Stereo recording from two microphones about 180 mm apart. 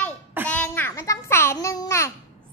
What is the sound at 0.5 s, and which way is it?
Babbling, 10° left (ahead or behind).